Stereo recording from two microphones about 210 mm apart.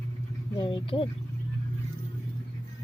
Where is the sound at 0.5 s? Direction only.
20° left (ahead or behind).